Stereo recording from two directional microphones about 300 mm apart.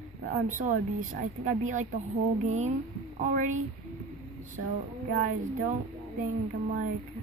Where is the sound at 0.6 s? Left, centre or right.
Right.